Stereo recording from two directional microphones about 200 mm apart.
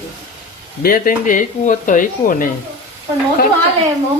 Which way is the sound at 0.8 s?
45° left (ahead or behind).